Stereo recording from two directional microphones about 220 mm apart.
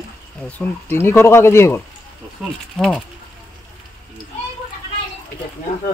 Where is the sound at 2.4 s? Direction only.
Centre (ahead or behind).